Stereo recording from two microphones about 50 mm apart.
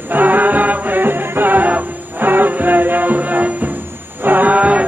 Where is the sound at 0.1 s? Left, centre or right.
Right.